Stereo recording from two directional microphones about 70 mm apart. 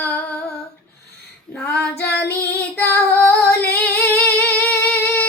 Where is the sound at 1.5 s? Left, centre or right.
Centre.